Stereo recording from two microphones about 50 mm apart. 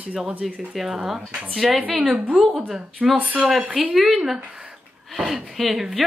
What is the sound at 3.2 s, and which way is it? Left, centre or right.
Speech, right.